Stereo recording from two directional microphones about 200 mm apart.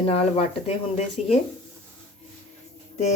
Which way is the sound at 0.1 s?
30° left (ahead or behind).